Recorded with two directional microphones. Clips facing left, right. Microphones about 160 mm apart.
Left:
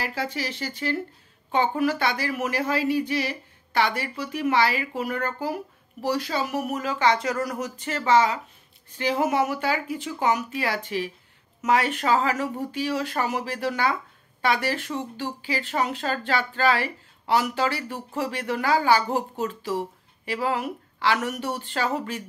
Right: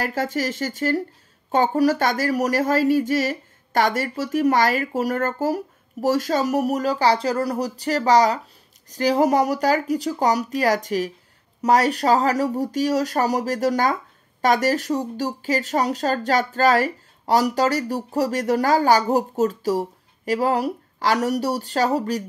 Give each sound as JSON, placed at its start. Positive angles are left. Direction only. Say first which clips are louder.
{"t": 0.0, "sound": "speech", "louder": "right 6 dB", "side_deg": -45}